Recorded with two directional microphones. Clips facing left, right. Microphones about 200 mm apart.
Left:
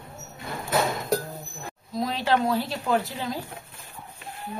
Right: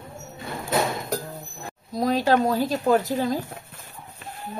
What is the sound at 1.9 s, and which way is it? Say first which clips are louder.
Speech: right 4 dB; 40° right (ahead or behind).